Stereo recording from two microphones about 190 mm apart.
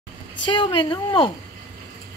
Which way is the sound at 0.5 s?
25° left (ahead or behind).